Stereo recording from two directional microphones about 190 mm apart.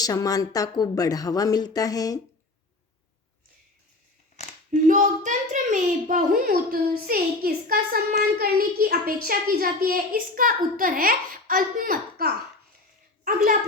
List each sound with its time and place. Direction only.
0.0 s speech: 20° left (ahead or behind)
4.7 s a child's voice: 40° right (ahead or behind)